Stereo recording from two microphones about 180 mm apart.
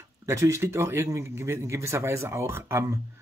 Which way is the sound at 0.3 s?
15° right (ahead or behind).